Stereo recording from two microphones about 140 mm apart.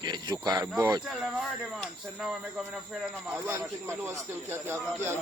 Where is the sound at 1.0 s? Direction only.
5° right (ahead or behind).